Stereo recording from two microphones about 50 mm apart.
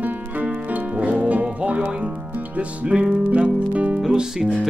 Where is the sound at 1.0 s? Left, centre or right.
Right.